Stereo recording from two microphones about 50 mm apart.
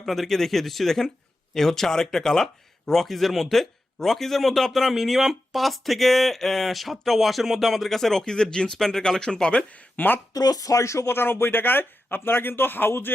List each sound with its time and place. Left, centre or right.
0.0 s speech: centre; by 9.6 s left
10.0 s a woman's voice: left
10.8 s speech: left
11.1 s a man's voice: left